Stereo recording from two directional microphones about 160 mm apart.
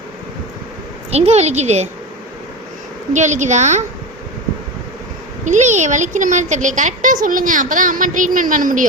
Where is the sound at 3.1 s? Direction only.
50° right (ahead or behind).